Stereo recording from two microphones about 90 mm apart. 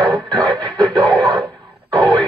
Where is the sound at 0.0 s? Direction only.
50° right (ahead or behind).